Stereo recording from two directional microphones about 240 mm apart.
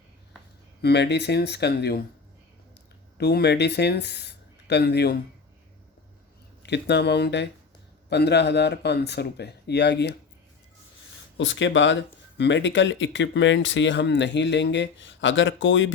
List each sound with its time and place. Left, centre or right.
0.8 s speech: left
3.2 s speech: left
6.6 s speech: left
11.3 s speech: left